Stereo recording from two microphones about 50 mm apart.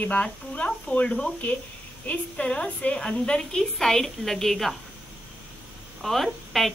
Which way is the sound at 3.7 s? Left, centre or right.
Centre.